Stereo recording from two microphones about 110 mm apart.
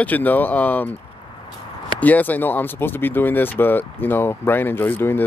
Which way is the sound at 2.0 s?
15° left (ahead or behind).